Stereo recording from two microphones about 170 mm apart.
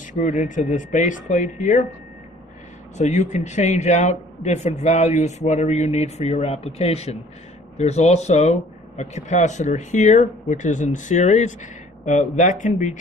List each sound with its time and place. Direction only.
0.0 s speech: 45° left (ahead or behind)
3.0 s speech: 45° left (ahead or behind)